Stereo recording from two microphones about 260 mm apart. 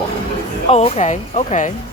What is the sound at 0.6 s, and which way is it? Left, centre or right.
Speech, left.